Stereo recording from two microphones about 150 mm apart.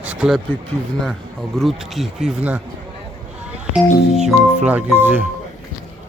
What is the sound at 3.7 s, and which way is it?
Speech, 5° right (ahead or behind).